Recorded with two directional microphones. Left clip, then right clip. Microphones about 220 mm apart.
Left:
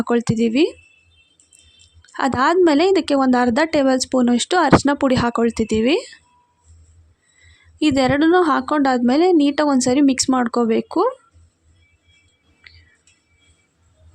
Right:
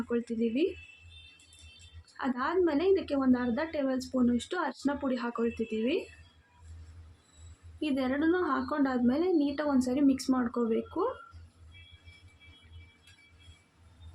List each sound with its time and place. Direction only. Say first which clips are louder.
0.1 s a woman's voice: left 13 dB; 45° left (ahead or behind)
2.1 s a woman's voice: left 14 dB; 50° left (ahead or behind)
7.8 s a woman's voice: left 15 dB; 50° left (ahead or behind)